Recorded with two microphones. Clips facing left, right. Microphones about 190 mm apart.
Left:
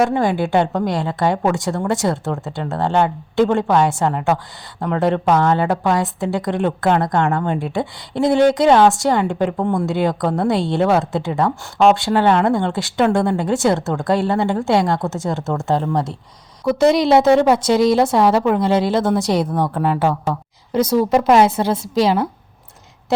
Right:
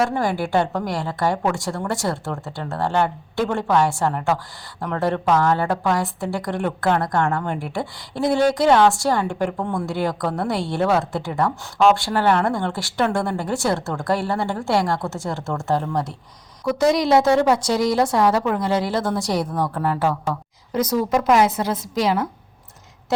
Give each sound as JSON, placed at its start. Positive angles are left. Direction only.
{"t": 0.0, "sound": "a woman's voice", "side_deg": 20}